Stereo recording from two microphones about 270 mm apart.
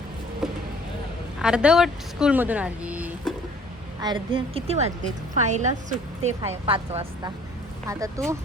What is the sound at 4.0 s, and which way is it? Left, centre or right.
A woman's voice, centre.